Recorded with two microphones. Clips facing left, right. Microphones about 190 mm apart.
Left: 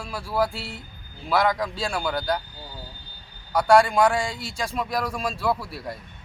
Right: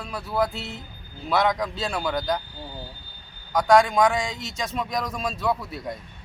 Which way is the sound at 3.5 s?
10° left (ahead or behind).